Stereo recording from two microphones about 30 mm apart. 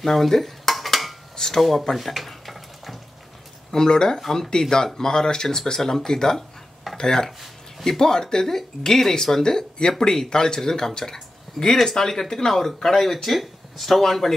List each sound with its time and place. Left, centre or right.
0.0 s dishes: centre
1.3 s a sound: centre
1.6 s speech: centre
2.0 s stir: centre
3.7 s speech: left
4.2 s speech: centre
4.5 s speech: left